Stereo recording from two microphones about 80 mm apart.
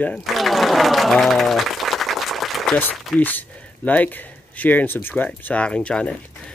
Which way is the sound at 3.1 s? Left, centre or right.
Left.